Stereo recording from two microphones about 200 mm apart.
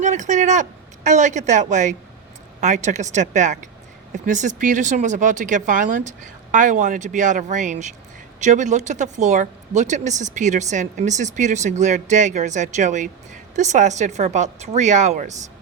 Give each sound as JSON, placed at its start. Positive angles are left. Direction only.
{"t": 0.0, "sound": "speech", "side_deg": -35}